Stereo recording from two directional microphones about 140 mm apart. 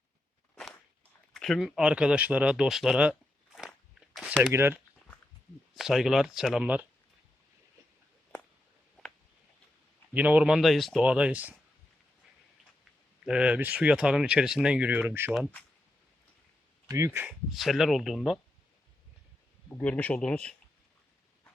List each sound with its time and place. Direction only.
1.3 s speech: centre (ahead or behind)
3.7 s crunch: centre (ahead or behind)
4.5 s speech: 15° right (ahead or behind)
5.7 s speech: centre (ahead or behind)
9.0 s a sound: centre (ahead or behind)
10.2 s speech: 10° right (ahead or behind)
13.2 s speech: 5° right (ahead or behind)
16.9 s speech: 20° right (ahead or behind)
17.2 s speech: centre (ahead or behind)
19.7 s speech: 10° left (ahead or behind)